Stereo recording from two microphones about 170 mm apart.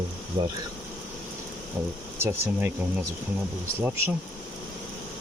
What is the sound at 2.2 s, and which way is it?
Speech, 15° right (ahead or behind).